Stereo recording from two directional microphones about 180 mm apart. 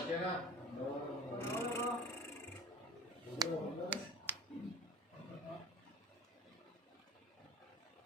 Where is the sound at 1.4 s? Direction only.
15° left (ahead or behind).